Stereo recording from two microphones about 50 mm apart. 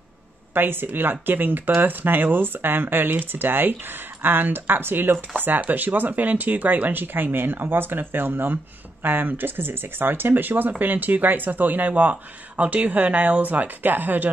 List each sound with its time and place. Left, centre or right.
0.6 s speech: right